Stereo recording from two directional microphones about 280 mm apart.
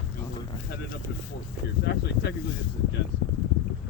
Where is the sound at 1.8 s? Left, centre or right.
Left.